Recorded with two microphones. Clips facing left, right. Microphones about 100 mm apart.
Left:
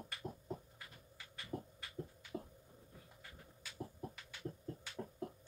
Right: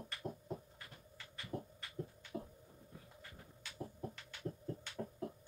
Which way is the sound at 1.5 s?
15° right (ahead or behind).